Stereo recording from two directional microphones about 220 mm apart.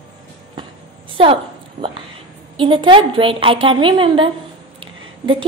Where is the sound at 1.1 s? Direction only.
25° right (ahead or behind).